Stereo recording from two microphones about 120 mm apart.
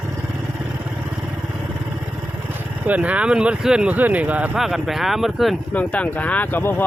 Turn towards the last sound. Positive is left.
turn(degrees=15)  # may be behind; listen again after turning